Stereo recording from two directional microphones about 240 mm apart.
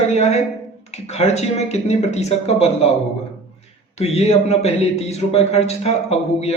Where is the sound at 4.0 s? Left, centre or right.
Left.